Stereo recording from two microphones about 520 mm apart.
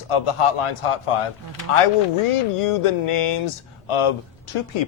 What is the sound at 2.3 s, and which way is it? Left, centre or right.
Speech, left.